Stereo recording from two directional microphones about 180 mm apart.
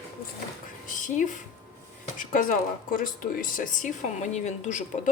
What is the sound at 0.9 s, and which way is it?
Speech, 45° left (ahead or behind).